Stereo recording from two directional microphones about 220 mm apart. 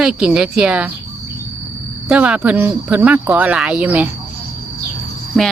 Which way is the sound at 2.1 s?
5° right (ahead or behind).